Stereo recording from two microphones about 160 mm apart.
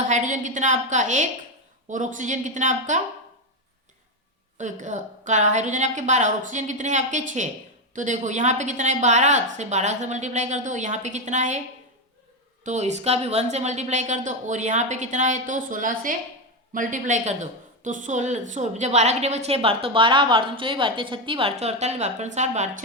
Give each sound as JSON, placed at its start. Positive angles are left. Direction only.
{"t": 0.1, "sound": "a woman's voice", "side_deg": -50}
{"t": 4.5, "sound": "a woman's voice", "side_deg": -50}
{"t": 12.6, "sound": "a woman's voice", "side_deg": -45}